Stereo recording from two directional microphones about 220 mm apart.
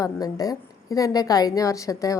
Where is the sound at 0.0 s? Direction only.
15° left (ahead or behind).